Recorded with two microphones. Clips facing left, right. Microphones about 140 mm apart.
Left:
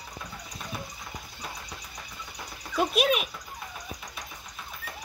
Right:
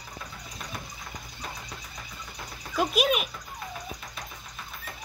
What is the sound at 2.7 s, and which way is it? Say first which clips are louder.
Speech: even; centre (ahead or behind).